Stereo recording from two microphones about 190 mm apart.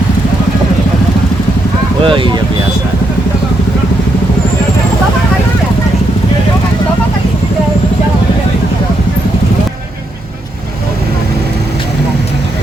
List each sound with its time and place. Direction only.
2.0 s speech: 25° right (ahead or behind)